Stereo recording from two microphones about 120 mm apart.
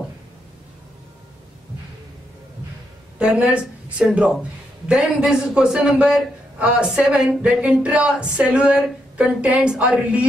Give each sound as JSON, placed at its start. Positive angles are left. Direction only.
{"t": 3.2, "sound": "speech", "side_deg": -10}